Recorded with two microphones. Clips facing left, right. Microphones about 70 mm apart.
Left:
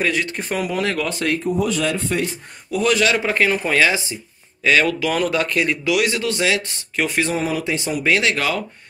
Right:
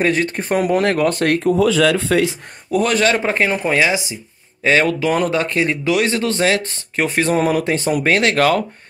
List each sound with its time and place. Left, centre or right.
0.0 s speech: right
2.7 s speech: right; by 4.2 s centre
4.6 s a man's voice: right
7.4 s speech: right